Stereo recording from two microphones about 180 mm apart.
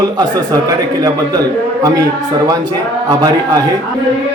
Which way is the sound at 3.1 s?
20° right (ahead or behind).